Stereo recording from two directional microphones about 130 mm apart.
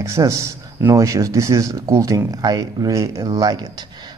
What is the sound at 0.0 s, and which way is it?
Speech, 25° right (ahead or behind).